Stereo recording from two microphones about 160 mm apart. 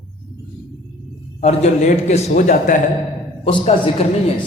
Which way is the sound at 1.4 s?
45° left (ahead or behind).